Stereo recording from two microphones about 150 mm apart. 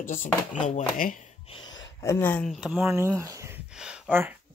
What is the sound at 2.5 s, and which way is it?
Speech, centre (ahead or behind).